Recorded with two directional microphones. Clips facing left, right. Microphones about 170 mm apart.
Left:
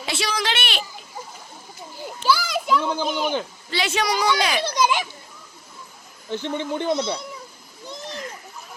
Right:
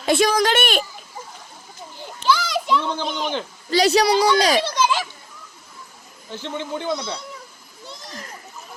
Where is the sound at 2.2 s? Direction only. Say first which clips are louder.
Right 1 dB; 10° left (ahead or behind).